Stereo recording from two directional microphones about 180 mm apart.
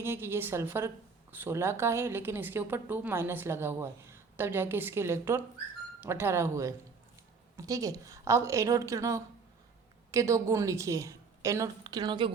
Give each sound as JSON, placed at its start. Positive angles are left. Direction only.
{"t": 0.0, "sound": "a woman's voice", "side_deg": -15}